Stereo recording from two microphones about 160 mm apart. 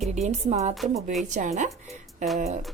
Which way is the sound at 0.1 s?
45° right (ahead or behind).